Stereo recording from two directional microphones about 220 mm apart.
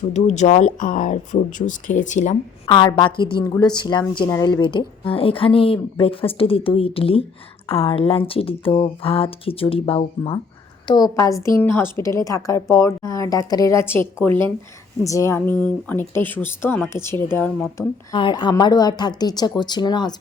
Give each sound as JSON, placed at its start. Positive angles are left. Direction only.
{"t": 0.1, "sound": "speech", "side_deg": 30}
{"t": 2.6, "sound": "speech", "side_deg": 20}